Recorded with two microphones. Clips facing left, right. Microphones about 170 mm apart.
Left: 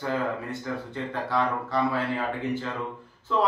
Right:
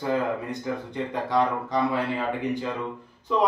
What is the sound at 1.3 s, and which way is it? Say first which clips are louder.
Speech: right 2 dB; 15° right (ahead or behind).